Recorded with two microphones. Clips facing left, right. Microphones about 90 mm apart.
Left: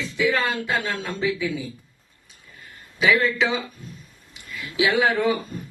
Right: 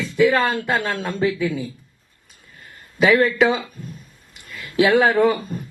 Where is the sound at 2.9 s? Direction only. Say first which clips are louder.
Right 5 dB; 50° right (ahead or behind).